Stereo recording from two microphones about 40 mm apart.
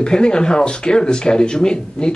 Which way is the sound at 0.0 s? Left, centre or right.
Left.